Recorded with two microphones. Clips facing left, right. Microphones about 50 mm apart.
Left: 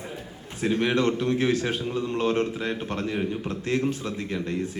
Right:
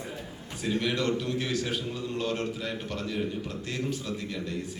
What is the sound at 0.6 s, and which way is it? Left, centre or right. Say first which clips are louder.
A man's voice: left 5 dB; left.